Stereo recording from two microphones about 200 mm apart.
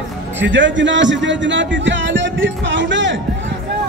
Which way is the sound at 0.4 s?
65° right (ahead or behind).